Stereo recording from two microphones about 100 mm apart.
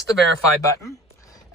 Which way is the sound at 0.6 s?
35° left (ahead or behind).